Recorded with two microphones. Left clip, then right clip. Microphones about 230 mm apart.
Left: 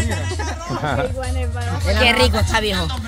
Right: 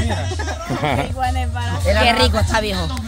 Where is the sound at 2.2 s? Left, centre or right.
Centre.